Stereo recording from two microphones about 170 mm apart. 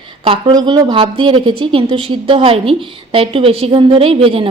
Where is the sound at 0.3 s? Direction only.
30° right (ahead or behind).